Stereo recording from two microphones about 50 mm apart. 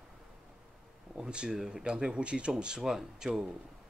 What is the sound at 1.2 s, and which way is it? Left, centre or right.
Speech, centre.